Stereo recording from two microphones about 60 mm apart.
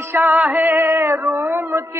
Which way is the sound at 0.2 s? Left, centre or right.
Centre.